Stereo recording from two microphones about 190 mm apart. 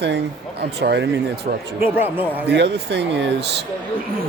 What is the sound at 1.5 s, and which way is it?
Speech, 45° right (ahead or behind).